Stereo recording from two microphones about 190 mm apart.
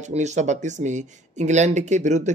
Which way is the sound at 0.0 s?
35° right (ahead or behind).